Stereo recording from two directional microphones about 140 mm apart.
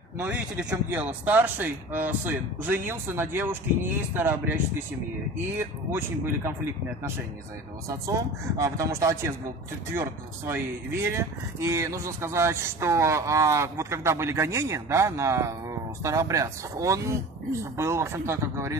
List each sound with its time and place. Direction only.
0.2 s a man's voice: 10° right (ahead or behind)
5.9 s a man's voice: 15° right (ahead or behind)
8.1 s speech: 20° right (ahead or behind)